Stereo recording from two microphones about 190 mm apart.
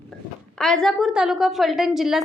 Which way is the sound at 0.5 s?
5° left (ahead or behind).